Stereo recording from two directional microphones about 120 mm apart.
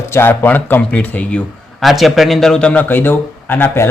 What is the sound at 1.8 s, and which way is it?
Speech, centre (ahead or behind).